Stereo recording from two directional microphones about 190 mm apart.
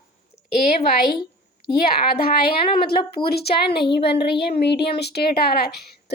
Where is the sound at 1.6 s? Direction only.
55° left (ahead or behind).